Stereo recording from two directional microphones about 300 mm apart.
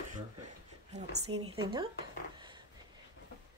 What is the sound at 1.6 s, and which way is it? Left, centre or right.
Speech, centre.